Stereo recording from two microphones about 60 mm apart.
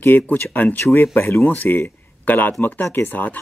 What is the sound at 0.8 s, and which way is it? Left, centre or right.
Speech, left.